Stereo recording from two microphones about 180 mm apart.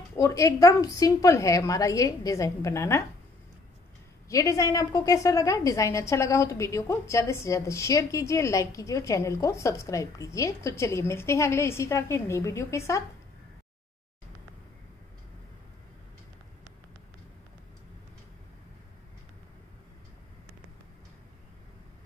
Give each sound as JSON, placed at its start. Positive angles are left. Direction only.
{"t": 0.1, "sound": "a woman's voice", "side_deg": 20}
{"t": 4.3, "sound": "a woman's voice", "side_deg": 15}